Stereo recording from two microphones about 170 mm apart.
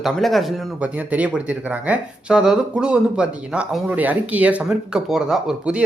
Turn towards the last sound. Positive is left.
turn(degrees=-5)  # may be behind; listen again after turning